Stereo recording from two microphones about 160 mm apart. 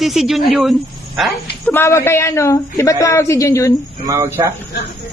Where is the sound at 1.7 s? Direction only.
15° left (ahead or behind).